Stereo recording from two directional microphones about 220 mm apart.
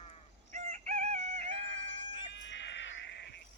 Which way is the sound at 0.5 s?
30° right (ahead or behind).